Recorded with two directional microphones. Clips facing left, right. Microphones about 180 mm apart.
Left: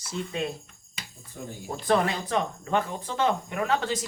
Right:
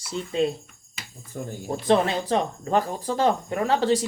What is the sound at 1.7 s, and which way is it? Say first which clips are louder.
Speech: right 3 dB; 25° right (ahead or behind).